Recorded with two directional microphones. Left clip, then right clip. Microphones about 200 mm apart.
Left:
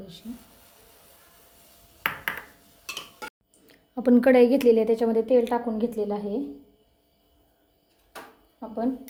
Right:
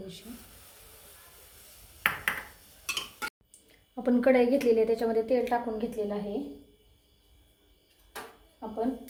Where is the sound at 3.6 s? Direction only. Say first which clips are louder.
Left 6 dB; 45° left (ahead or behind).